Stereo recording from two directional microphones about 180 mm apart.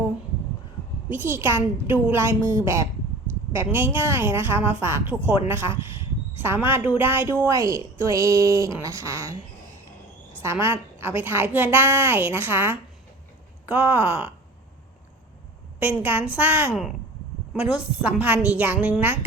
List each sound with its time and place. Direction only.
1.1 s a woman's voice: 10° right (ahead or behind)
10.4 s a woman's voice: 10° right (ahead or behind)
15.8 s a woman's voice: 10° right (ahead or behind)